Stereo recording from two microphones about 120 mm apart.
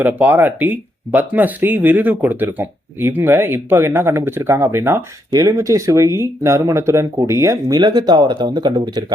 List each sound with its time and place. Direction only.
0.0 s speech: 15° right (ahead or behind)
7.8 s speech: 35° right (ahead or behind)